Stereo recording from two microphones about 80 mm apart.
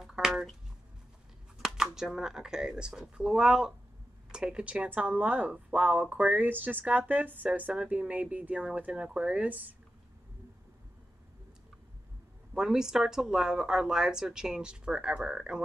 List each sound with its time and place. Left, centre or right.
0.0 s a sound: centre
1.6 s speech: centre
12.5 s speech: centre